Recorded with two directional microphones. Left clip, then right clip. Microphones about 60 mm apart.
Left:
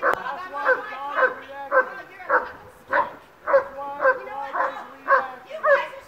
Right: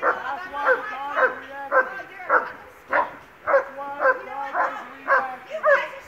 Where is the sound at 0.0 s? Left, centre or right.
Centre.